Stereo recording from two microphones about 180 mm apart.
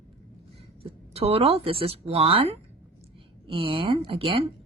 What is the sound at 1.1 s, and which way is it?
A woman's voice, 35° right (ahead or behind).